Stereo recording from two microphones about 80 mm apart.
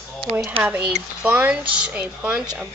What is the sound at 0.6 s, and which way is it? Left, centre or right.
Speech, centre.